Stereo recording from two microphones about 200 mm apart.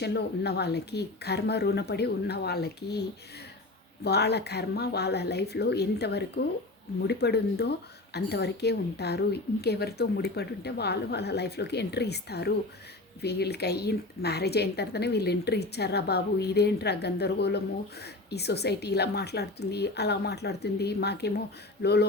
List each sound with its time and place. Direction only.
0.0 s speech: 55° left (ahead or behind)